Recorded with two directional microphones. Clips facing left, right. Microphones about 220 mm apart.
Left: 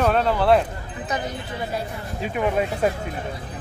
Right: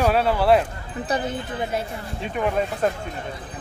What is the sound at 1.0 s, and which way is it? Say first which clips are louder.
Speech: right 3 dB; 30° right (ahead or behind).